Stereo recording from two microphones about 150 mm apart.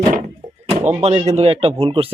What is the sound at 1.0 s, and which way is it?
Speech, 45° right (ahead or behind).